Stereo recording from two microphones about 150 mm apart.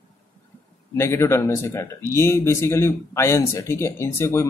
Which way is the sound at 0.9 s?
15° left (ahead or behind).